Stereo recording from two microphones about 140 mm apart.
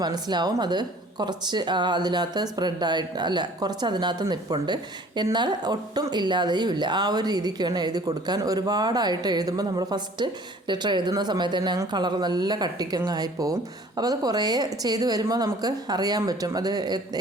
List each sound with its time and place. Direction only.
0.0 s speech: 30° right (ahead or behind)